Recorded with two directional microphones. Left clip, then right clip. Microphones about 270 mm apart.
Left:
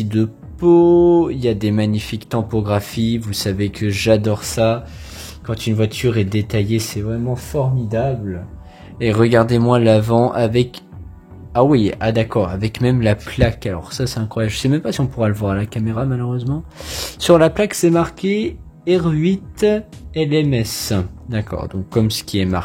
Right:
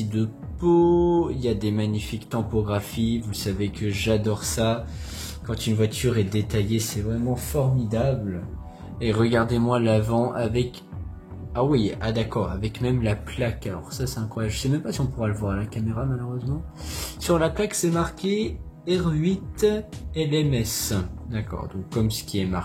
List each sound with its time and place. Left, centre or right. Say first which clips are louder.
0.1 s speech: left 9 dB; left
9.0 s speech: left 8 dB; left